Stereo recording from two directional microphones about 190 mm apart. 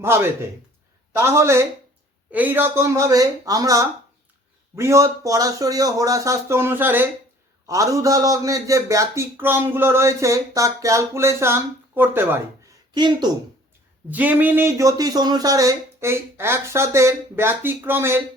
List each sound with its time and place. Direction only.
0.0 s a man's voice: 15° right (ahead or behind)
12.9 s speech: 25° right (ahead or behind)
14.1 s a man's voice: 10° right (ahead or behind)